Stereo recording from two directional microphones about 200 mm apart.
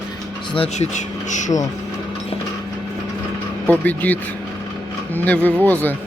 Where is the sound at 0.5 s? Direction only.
30° left (ahead or behind).